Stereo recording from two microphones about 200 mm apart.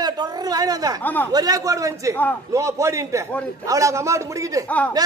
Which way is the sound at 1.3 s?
20° right (ahead or behind).